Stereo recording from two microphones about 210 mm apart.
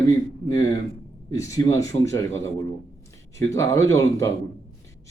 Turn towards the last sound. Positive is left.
turn(degrees=15)  # may be behind; listen again after turning